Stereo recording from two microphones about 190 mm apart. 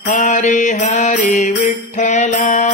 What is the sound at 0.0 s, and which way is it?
Mantra, 40° left (ahead or behind).